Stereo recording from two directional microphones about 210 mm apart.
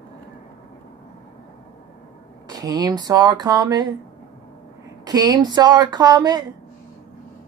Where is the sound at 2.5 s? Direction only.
20° right (ahead or behind).